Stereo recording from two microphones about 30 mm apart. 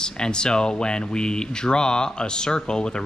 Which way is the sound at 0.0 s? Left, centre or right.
Left.